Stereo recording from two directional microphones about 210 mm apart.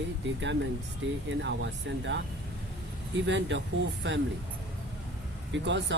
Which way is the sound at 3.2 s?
60° right (ahead or behind).